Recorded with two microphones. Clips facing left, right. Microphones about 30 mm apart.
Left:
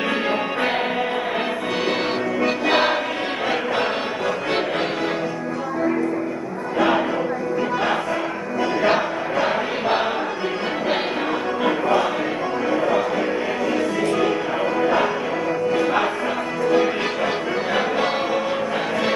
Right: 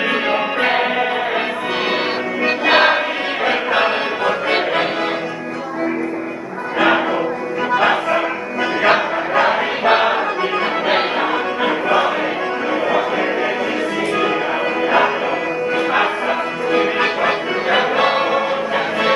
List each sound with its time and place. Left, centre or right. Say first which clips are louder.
0.1 s music: right 4 dB; right
2.4 s music: right 6 dB; right
8.8 s choir: right 7 dB; right
11.6 s music: right 3 dB; right
16.7 s music: right 4 dB; right